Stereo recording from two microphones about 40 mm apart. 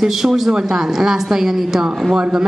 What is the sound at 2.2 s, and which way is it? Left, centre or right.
Speech, right.